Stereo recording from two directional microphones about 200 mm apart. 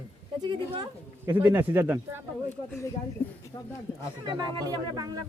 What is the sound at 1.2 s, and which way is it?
Speech, 10° right (ahead or behind).